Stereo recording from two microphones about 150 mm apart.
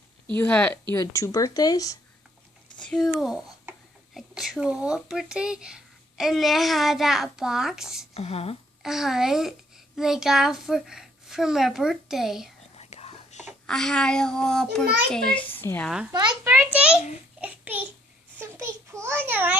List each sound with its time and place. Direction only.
0.3 s a woman's voice: 10° left (ahead or behind)
0.9 s speech: 20° left (ahead or behind)
2.8 s speech: 5° left (ahead or behind)
8.1 s a woman's voice: 40° left (ahead or behind)
8.8 s a child's voice: centre (ahead or behind)
12.7 s whispering: 45° left (ahead or behind)
13.7 s a woman's voice: 5° left (ahead or behind)
16.4 s a child's voice: 15° right (ahead or behind)
17.4 s child singing: 10° right (ahead or behind)
18.3 s a sound: 15° right (ahead or behind)